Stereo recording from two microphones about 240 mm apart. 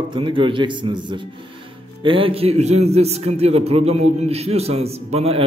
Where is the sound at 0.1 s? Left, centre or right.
Right.